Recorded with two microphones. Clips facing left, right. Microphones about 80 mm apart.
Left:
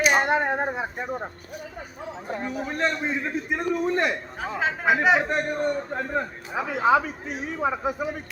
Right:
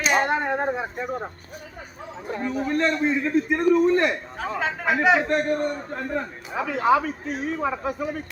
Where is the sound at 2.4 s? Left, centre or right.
Centre.